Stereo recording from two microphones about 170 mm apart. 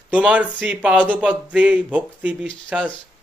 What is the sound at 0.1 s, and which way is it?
Speech, 10° right (ahead or behind).